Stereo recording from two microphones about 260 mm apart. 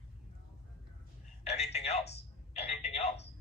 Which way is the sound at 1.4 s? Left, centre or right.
Left.